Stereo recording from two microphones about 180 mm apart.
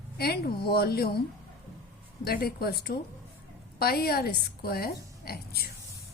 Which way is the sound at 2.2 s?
60° left (ahead or behind).